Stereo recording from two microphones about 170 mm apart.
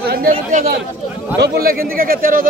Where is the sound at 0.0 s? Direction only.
65° right (ahead or behind).